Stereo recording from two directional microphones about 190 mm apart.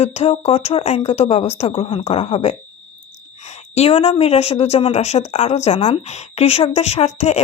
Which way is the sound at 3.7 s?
30° left (ahead or behind).